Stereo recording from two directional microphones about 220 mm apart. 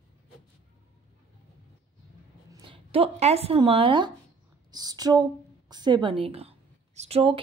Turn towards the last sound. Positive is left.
turn(degrees=-25)  # may be behind; listen again after turning